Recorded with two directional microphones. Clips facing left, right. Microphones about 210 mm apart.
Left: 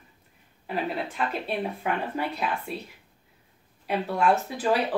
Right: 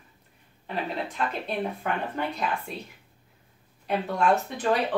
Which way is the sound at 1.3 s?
5° left (ahead or behind).